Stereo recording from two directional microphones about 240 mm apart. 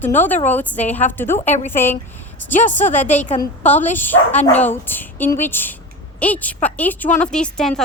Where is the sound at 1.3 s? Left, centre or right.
Left.